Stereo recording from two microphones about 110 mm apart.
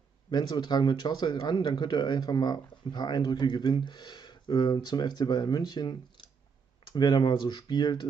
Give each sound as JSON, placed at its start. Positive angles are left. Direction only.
{"t": 0.3, "sound": "speech", "side_deg": 40}